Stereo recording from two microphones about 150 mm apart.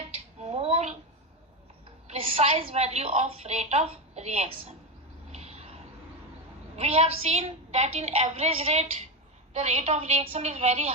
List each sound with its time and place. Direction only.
0.4 s a sound: 45° right (ahead or behind)
2.0 s a woman's voice: 40° right (ahead or behind)
5.3 s vehicle: 45° right (ahead or behind)
6.7 s a woman's voice: 45° right (ahead or behind)